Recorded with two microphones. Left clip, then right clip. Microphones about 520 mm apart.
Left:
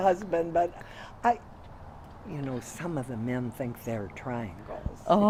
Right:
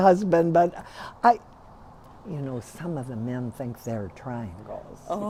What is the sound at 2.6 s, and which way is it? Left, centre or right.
Speech, right.